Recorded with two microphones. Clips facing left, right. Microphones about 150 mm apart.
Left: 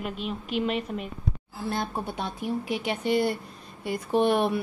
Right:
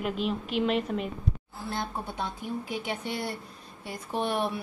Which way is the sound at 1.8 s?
70° left (ahead or behind).